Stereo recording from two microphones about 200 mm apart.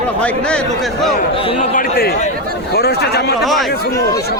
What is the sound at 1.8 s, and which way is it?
A man's voice, 50° left (ahead or behind).